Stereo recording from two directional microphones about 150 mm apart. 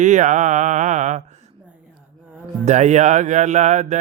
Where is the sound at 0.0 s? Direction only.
55° right (ahead or behind).